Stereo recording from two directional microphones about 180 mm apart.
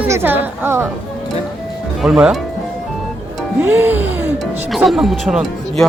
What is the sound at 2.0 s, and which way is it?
Speech, 5° right (ahead or behind).